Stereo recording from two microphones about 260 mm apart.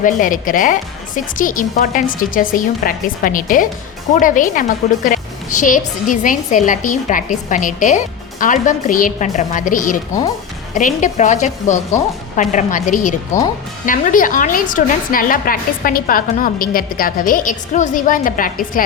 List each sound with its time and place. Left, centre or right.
0.0 s a woman's voice: left